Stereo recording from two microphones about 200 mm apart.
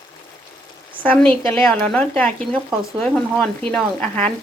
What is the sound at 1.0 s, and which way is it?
Speech, 5° left (ahead or behind).